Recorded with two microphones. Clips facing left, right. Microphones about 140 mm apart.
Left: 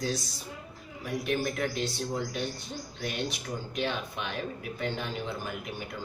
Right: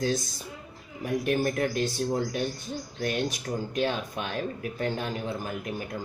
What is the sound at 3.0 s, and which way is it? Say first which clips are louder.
Speech: right 5 dB; 50° right (ahead or behind).